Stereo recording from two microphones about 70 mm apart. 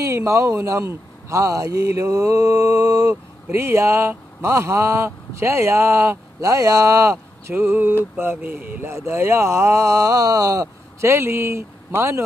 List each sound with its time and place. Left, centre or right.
0.0 s speech: right
3.5 s speech: right
7.5 s speech: right